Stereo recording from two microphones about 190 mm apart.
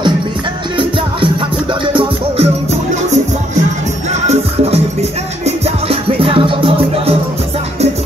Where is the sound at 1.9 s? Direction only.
25° right (ahead or behind).